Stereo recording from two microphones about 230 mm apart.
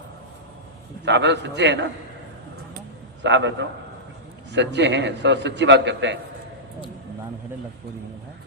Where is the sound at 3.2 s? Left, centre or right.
Right.